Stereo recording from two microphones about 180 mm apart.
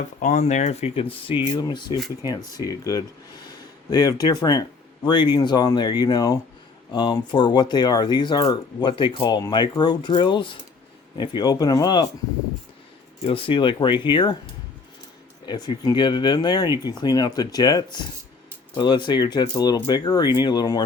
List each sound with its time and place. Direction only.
0.2 s speech: 45° left (ahead or behind); by 12.0 s 25° left (ahead or behind)
13.2 s speech: 30° left (ahead or behind)
15.4 s speech: 20° left (ahead or behind)